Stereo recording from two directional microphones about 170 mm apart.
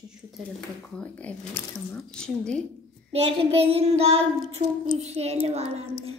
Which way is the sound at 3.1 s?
35° right (ahead or behind).